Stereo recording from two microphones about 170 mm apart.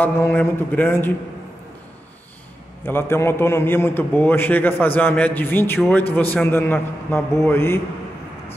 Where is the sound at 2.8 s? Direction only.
15° left (ahead or behind).